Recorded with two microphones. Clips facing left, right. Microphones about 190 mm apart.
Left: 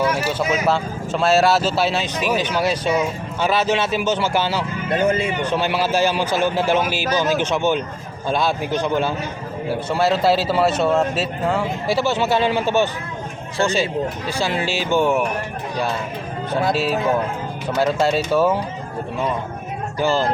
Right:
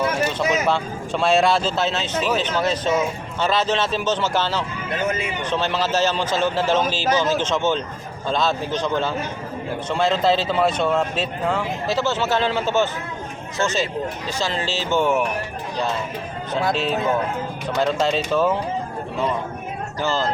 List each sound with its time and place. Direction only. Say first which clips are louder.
0.3 s speech: left 1 dB; 5° left (ahead or behind)
4.9 s speech: left 5 dB; 30° left (ahead or behind)
5.4 s speech: left 2 dB; 10° left (ahead or behind)
14.3 s speech: left 3 dB; 10° left (ahead or behind)
16.5 s speech: left 2 dB; 10° left (ahead or behind)
20.0 s speech: left 4 dB; 15° left (ahead or behind)